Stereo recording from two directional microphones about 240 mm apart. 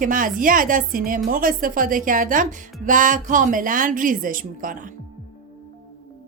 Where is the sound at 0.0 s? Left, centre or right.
Right.